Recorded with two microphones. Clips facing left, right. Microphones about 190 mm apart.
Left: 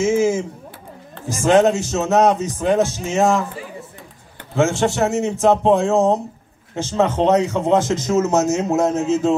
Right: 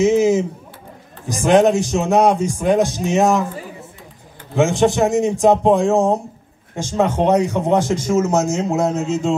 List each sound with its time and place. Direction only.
0.0 s a sound: 20° right (ahead or behind)
1.3 s a man's voice: 15° right (ahead or behind)
4.6 s a man's voice: 15° right (ahead or behind)